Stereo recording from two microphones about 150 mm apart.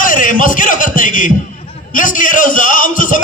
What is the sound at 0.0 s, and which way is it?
A man's voice, 65° left (ahead or behind).